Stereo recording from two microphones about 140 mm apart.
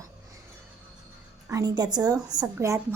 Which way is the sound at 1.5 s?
25° right (ahead or behind).